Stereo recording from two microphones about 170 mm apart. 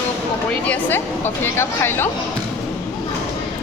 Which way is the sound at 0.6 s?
10° left (ahead or behind).